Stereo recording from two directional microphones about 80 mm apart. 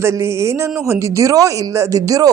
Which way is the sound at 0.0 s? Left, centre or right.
Right.